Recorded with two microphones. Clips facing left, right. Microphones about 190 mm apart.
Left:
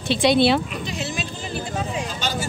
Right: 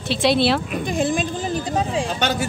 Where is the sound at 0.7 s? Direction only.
50° right (ahead or behind).